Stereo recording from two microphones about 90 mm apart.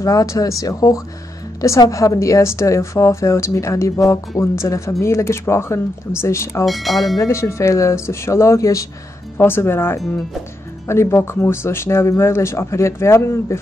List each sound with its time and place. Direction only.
0.0 s speech: 40° left (ahead or behind)
6.6 s speech: centre (ahead or behind)
7.2 s speech: 30° left (ahead or behind)
9.4 s speech: 25° left (ahead or behind)